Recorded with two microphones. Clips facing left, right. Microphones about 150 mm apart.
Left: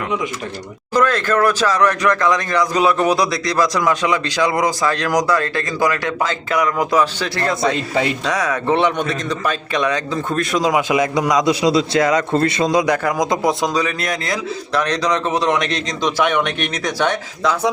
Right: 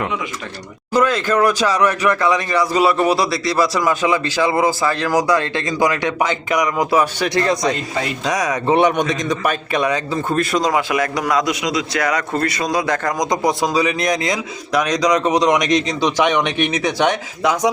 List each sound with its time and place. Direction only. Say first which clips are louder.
0.9 s speech: even; 10° right (ahead or behind)
5.4 s speech: right 1 dB; 20° right (ahead or behind); by 10.7 s centre (ahead or behind)
10.7 s a man's voice: left 2 dB; 15° left (ahead or behind)
12.8 s speech: left 2 dB; 10° left (ahead or behind)
13.8 s speech: right 4 dB; 15° right (ahead or behind)